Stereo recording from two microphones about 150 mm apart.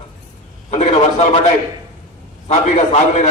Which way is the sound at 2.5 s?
45° left (ahead or behind).